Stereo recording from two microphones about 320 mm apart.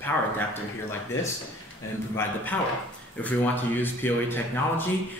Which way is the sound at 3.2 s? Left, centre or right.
Centre.